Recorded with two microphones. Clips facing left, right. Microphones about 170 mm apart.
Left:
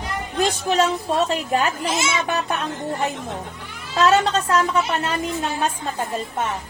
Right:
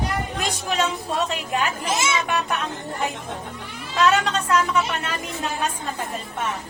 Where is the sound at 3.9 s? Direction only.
30° left (ahead or behind).